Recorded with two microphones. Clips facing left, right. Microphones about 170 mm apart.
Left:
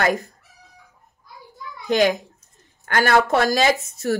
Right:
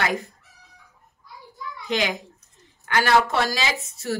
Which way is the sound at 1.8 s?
45° left (ahead or behind).